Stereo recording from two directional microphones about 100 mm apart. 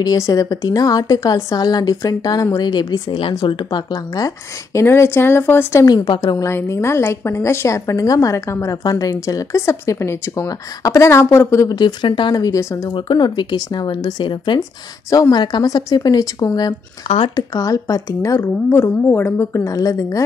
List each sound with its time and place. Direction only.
0.0 s a woman's voice: 40° left (ahead or behind)
4.7 s a woman's voice: 25° left (ahead or behind)
11.8 s a woman's voice: 50° left (ahead or behind); by 12.9 s 30° left (ahead or behind)
12.9 s speech: 50° left (ahead or behind)
15.0 s a woman's voice: 35° left (ahead or behind)
17.1 s speech: 90° left
17.4 s a woman's voice: 35° left (ahead or behind)